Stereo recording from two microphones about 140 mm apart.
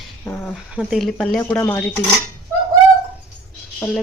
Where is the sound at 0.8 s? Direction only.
Centre (ahead or behind).